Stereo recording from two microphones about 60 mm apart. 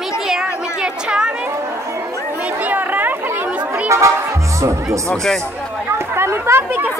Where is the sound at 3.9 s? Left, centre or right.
Right.